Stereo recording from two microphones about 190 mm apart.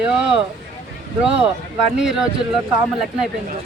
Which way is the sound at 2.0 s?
5° right (ahead or behind).